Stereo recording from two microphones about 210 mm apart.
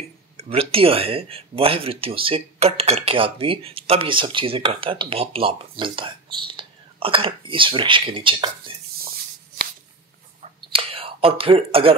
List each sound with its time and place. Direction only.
0.4 s speech: 25° right (ahead or behind)
10.4 s whispering: 25° right (ahead or behind)